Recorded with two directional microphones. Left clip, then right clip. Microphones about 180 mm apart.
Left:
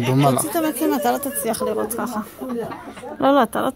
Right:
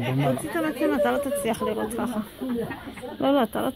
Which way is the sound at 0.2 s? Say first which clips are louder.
Left 8 dB; 75° left (ahead or behind).